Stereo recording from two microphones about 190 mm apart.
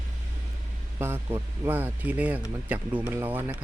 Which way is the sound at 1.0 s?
10° right (ahead or behind).